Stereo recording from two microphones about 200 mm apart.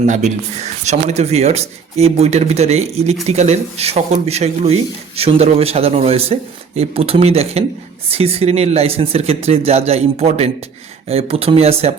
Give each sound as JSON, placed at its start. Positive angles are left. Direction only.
{"t": 0.0, "sound": "speech", "side_deg": -35}